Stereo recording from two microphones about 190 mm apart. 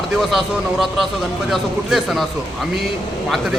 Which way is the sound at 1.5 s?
Centre (ahead or behind).